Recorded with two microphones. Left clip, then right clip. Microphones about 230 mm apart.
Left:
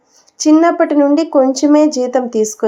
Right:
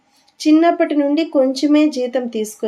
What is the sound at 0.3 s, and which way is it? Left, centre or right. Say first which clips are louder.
Speech: left 3 dB; centre.